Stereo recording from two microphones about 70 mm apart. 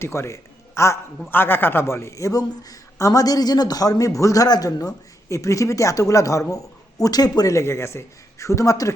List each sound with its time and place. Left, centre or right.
0.0 s a man's voice: left
1.3 s a man's voice: left
2.4 s a man's voice: left
5.3 s speech: left
7.5 s speech: left